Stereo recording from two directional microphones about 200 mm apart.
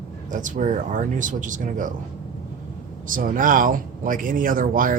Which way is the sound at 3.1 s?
45° right (ahead or behind).